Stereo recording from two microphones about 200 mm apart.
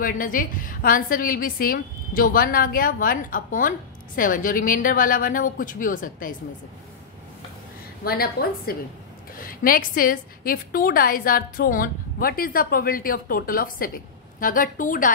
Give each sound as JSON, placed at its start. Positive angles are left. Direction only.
{"t": 0.0, "sound": "a woman's voice", "side_deg": 45}
{"t": 8.0, "sound": "a woman's voice", "side_deg": 50}